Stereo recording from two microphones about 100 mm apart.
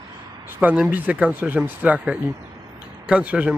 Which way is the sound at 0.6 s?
15° right (ahead or behind).